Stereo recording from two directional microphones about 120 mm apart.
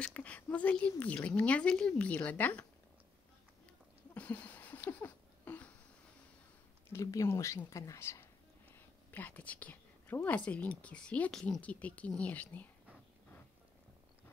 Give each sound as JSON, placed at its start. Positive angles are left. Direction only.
{"t": 0.0, "sound": "speech", "side_deg": 10}
{"t": 4.1, "sound": "a sound", "side_deg": 10}
{"t": 6.9, "sound": "speech", "side_deg": 25}